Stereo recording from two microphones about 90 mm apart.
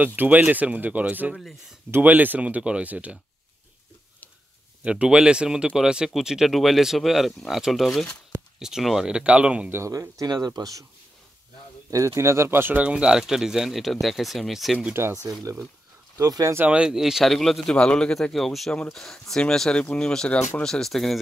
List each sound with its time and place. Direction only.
0.0 s speech: 15° right (ahead or behind)
4.8 s a man's voice: 10° right (ahead or behind)
9.7 s speech: 30° right (ahead or behind)
11.9 s speech: 35° right (ahead or behind)
12.8 s a man's voice: 10° right (ahead or behind)
16.2 s speech: 40° right (ahead or behind)
16.5 s a man's voice: 15° right (ahead or behind); by 21.2 s centre (ahead or behind)